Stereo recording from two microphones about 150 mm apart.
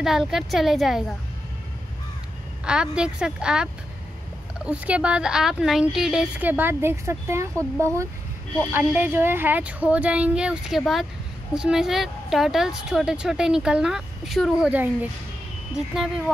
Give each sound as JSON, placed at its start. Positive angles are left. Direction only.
{"t": 0.0, "sound": "speech", "side_deg": 0}
{"t": 2.6, "sound": "speech", "side_deg": -5}